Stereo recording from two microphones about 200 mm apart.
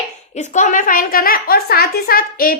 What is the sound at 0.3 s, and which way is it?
A woman's voice, 35° left (ahead or behind).